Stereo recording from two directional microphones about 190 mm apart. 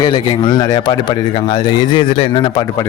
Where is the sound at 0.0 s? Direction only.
25° left (ahead or behind).